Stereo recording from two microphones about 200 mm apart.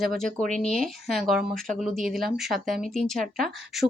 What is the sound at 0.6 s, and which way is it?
Speech, 5° left (ahead or behind).